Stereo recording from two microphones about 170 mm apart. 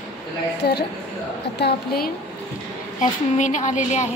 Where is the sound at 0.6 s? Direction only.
70° left (ahead or behind).